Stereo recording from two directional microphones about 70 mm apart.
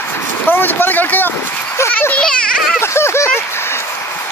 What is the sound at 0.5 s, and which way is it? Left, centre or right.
Speech, left.